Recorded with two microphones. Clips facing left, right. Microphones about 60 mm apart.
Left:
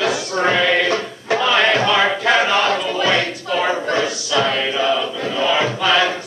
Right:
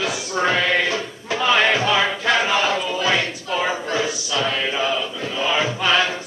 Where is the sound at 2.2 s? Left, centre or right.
Centre.